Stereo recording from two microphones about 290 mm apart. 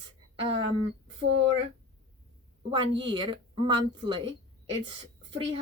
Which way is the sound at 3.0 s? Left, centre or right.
Centre.